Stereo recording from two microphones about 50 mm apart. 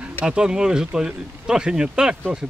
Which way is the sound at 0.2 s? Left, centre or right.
Centre.